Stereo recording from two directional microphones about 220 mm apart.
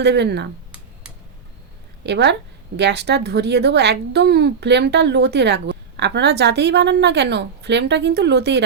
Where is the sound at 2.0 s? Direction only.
50° right (ahead or behind).